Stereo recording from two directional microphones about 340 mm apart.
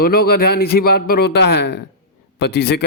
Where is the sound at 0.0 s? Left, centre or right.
Left.